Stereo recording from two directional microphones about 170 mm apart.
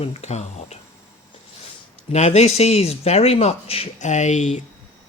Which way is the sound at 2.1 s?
40° left (ahead or behind).